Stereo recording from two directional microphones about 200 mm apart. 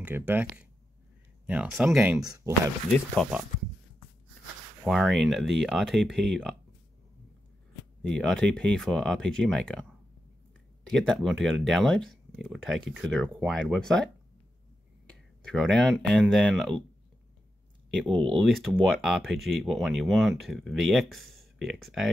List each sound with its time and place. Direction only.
0.0 s speech: 10° right (ahead or behind)
2.2 s speech: 15° right (ahead or behind)
2.9 s speech: 5° left (ahead or behind)
4.8 s speech: centre (ahead or behind)
8.2 s speech: 5° left (ahead or behind)
10.9 s speech: centre (ahead or behind)
15.0 s speech: 5° left (ahead or behind)
18.4 s speech: centre (ahead or behind)